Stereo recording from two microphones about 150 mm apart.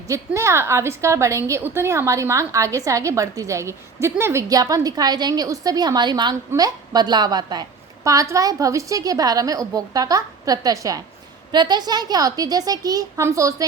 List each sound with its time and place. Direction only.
0.1 s a woman's voice: 20° right (ahead or behind)